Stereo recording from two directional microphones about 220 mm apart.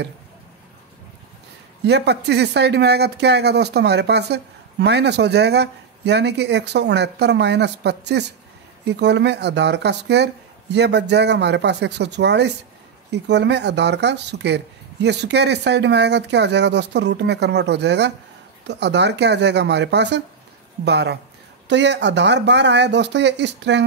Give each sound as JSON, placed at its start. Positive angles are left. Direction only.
{"t": 1.9, "sound": "speech", "side_deg": -50}